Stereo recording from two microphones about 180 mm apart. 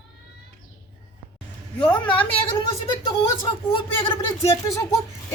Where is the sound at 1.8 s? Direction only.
25° left (ahead or behind).